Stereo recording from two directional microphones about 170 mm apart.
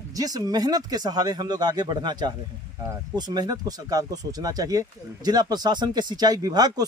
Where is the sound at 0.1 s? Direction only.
20° right (ahead or behind).